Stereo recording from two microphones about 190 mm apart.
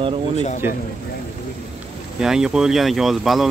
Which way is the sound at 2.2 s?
5° right (ahead or behind).